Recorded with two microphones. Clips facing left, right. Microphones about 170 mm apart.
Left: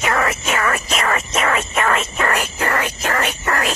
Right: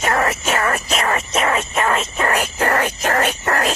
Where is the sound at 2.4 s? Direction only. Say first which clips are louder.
Right 2 dB; 40° right (ahead or behind).